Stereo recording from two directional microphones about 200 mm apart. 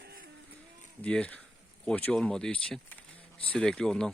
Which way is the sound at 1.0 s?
5° left (ahead or behind).